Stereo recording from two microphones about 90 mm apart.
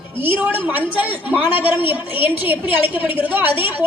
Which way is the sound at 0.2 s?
20° right (ahead or behind).